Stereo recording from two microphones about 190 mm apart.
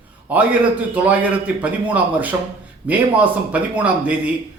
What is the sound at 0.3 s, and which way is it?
Speech, 5° right (ahead or behind).